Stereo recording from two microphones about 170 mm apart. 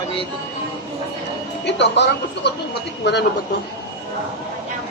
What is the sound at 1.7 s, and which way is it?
Speech, 90° left.